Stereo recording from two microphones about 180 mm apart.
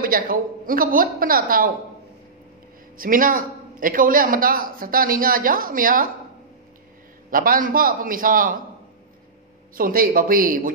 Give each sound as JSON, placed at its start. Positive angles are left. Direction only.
{"t": 0.0, "sound": "a man's voice", "side_deg": -55}
{"t": 3.0, "sound": "a man's voice", "side_deg": -50}
{"t": 7.2, "sound": "a man's voice", "side_deg": -50}
{"t": 9.8, "sound": "a man's voice", "side_deg": -50}